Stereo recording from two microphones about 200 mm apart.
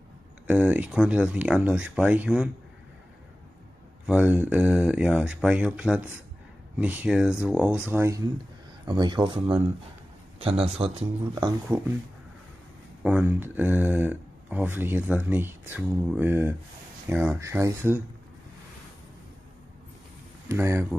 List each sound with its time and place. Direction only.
0.5 s speech: 5° right (ahead or behind)
4.0 s speech: 5° right (ahead or behind)
13.0 s speech: 10° right (ahead or behind)
20.4 s speech: 15° right (ahead or behind)